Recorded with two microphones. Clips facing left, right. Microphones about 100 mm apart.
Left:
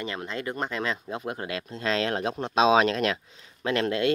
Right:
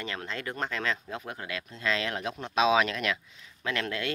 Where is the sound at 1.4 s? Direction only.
35° left (ahead or behind).